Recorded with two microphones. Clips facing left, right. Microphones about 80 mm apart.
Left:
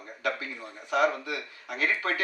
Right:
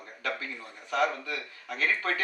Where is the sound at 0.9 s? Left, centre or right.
Centre.